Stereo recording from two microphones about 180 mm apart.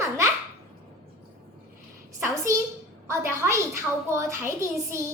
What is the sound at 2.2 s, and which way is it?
A child's voice, 15° right (ahead or behind).